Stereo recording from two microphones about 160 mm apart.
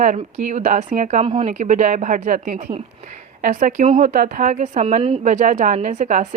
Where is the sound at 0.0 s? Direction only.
50° right (ahead or behind).